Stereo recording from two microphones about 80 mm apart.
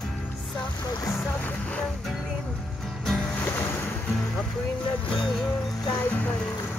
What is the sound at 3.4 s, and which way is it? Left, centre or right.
Music, left.